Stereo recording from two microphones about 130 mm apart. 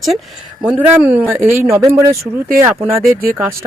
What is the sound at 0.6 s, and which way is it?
Speech, 10° right (ahead or behind).